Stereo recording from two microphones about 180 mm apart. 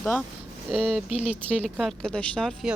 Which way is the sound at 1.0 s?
35° left (ahead or behind).